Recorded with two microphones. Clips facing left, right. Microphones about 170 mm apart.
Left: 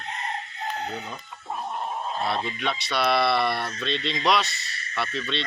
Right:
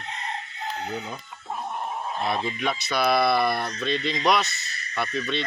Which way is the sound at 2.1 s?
15° right (ahead or behind).